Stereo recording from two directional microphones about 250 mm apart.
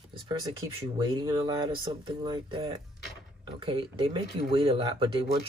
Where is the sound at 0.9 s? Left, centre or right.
Centre.